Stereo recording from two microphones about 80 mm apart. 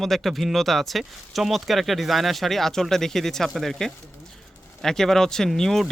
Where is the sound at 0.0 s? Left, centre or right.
Centre.